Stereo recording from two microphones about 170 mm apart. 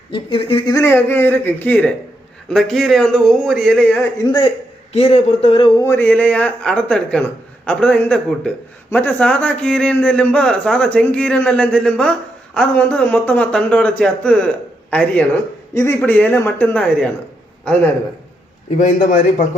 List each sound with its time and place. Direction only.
0.1 s speech: 30° left (ahead or behind)
0.7 s a man's voice: 15° left (ahead or behind)
4.2 s a man's voice: 25° left (ahead or behind)
4.9 s speech: 40° left (ahead or behind)
5.8 s a man's voice: 15° left (ahead or behind)
18.8 s a man's voice: 45° left (ahead or behind)